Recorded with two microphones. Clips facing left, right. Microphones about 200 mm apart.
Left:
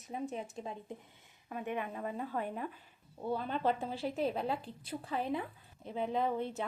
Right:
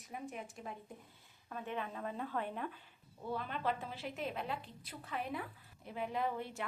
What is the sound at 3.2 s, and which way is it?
A woman's voice, 30° left (ahead or behind).